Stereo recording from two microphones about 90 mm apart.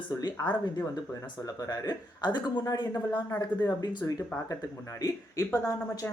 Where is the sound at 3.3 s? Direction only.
20° left (ahead or behind).